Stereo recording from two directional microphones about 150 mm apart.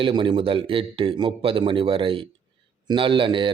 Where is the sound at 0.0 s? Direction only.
35° right (ahead or behind).